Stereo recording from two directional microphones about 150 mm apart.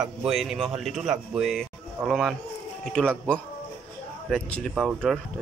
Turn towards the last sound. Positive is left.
turn(degrees=0)  # may be behind; listen again after turning